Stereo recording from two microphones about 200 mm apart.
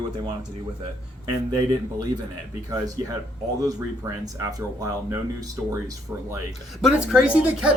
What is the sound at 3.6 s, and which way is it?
Speech, 15° right (ahead or behind).